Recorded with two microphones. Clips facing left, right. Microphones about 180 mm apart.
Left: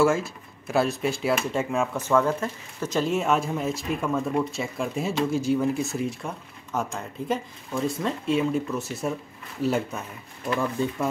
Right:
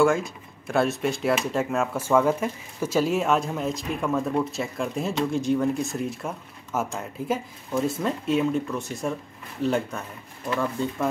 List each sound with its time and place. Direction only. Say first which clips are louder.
0.0 s speech: right 1 dB; 5° left (ahead or behind)